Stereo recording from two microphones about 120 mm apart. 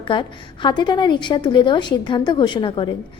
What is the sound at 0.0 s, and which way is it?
A woman's voice, 40° left (ahead or behind).